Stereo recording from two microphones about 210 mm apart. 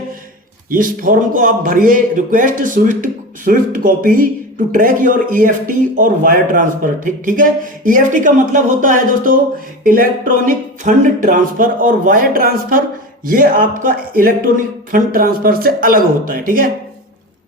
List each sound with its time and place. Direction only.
0.7 s speech: 40° right (ahead or behind)